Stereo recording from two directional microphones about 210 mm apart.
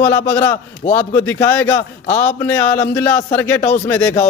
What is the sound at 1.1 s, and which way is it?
Speech, 10° left (ahead or behind).